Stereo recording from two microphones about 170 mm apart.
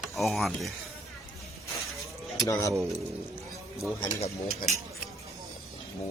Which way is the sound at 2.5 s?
20° left (ahead or behind).